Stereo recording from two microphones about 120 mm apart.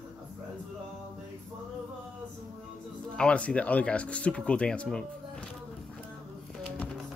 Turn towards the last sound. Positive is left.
turn(degrees=5)  # may be behind; listen again after turning